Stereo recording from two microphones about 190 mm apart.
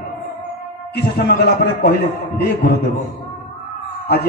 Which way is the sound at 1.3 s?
55° left (ahead or behind).